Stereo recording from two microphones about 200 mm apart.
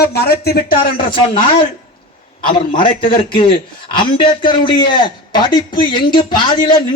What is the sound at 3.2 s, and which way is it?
A man's voice, 25° left (ahead or behind).